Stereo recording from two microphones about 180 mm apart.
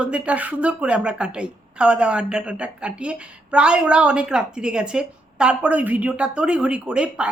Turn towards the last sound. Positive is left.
turn(degrees=-5)  # may be behind; listen again after turning